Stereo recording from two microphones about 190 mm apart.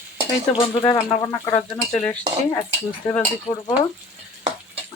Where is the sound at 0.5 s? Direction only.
15° left (ahead or behind).